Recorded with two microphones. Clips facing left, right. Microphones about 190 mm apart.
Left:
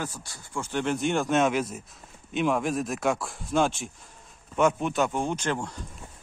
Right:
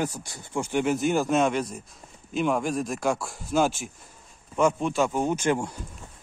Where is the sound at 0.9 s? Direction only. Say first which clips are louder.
Even; centre (ahead or behind).